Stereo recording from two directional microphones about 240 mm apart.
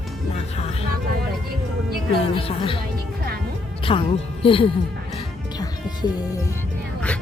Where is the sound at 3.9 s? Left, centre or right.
Left.